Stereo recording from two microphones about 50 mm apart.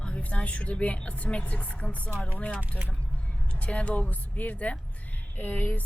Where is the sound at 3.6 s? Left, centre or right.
Left.